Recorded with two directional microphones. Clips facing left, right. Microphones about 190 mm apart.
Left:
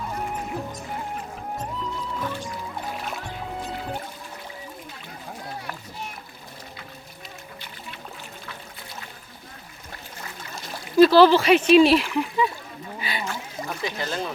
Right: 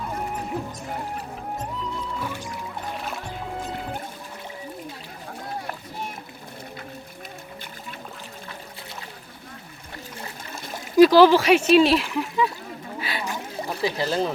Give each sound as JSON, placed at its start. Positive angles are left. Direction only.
{"t": 2.1, "sound": "music", "side_deg": -5}
{"t": 10.9, "sound": "speech", "side_deg": -15}
{"t": 13.0, "sound": "a sound", "side_deg": 0}
{"t": 13.7, "sound": "speech", "side_deg": -30}